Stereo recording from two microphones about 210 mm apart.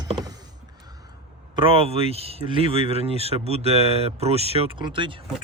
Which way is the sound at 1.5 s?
25° right (ahead or behind).